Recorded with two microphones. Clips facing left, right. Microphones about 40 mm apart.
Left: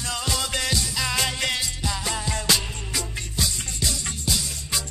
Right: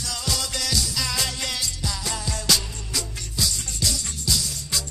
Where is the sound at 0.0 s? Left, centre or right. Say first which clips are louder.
Left 2 dB; left.